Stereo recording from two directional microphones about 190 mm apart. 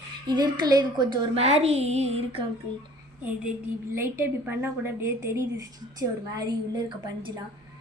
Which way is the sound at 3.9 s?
15° right (ahead or behind).